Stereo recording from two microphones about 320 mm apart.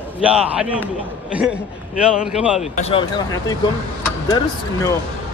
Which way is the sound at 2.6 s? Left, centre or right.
Centre.